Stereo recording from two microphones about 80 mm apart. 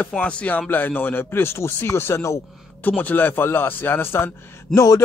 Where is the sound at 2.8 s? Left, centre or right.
Left.